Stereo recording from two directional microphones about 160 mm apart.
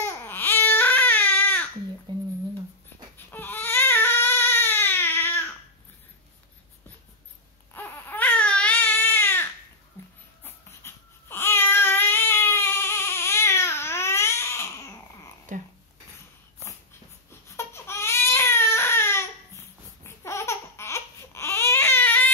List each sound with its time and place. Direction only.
0.0 s baby cry: 15° left (ahead or behind)
2.1 s a sound: 30° right (ahead or behind)
3.3 s baby cry: 10° left (ahead or behind)
7.7 s baby cry: 10° left (ahead or behind)
10.4 s babbling: 15° left (ahead or behind)
17.6 s baby cry: 15° left (ahead or behind)